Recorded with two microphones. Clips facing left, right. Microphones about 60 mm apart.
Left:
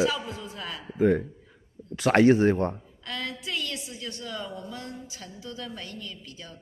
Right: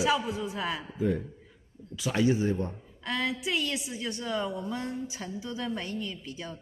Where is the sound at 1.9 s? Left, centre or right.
Left.